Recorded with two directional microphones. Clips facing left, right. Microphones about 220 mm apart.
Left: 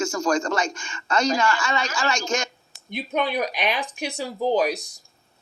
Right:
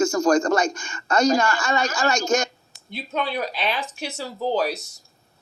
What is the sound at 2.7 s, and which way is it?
Speech, 20° left (ahead or behind).